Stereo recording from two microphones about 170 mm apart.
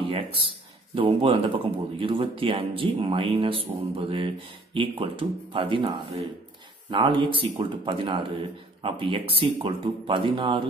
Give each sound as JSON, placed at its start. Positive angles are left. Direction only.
{"t": 0.1, "sound": "speech", "side_deg": -30}
{"t": 6.9, "sound": "speech", "side_deg": -30}